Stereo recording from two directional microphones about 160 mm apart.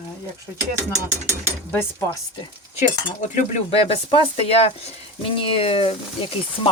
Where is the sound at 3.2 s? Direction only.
45° left (ahead or behind).